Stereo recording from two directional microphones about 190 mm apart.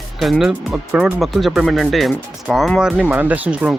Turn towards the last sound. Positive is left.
turn(degrees=-5)  # may be behind; listen again after turning